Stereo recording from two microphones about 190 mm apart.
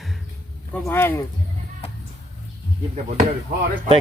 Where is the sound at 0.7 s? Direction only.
10° left (ahead or behind).